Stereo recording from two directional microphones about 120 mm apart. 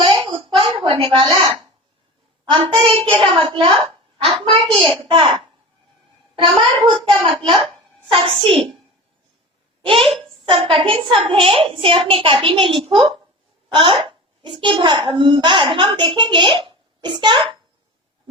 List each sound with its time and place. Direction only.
0.1 s a sound: 55° right (ahead or behind)
2.5 s a child's voice: 45° right (ahead or behind)
4.8 s a child's voice: 45° right (ahead or behind)
9.8 s a child's voice: 50° right (ahead or behind)